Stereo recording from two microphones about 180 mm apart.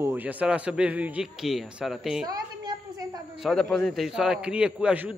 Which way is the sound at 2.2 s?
20° right (ahead or behind).